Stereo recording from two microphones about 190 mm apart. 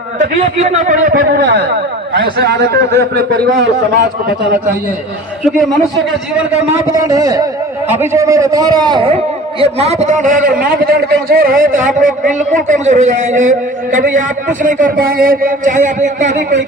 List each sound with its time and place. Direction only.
0.4 s a man's voice: 35° right (ahead or behind); by 3.7 s 55° right (ahead or behind)
5.4 s a man's voice: centre (ahead or behind)
6.9 s a man's voice: 20° right (ahead or behind); by 16.4 s 40° right (ahead or behind)